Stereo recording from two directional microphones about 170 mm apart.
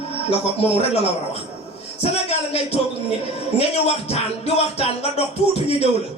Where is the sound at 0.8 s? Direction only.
35° left (ahead or behind).